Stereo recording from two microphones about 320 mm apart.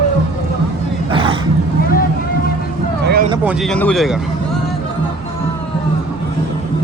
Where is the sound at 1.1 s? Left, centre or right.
Centre.